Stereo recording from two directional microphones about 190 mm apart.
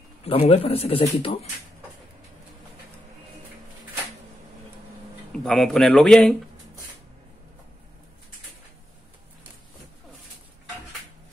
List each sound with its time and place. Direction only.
0.2 s speech: 30° left (ahead or behind)
5.3 s speech: 5° left (ahead or behind)